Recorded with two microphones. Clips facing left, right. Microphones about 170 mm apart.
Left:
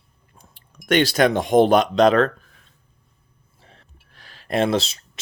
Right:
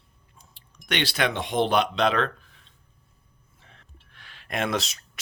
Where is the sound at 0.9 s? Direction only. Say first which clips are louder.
Left 9 dB; 45° left (ahead or behind).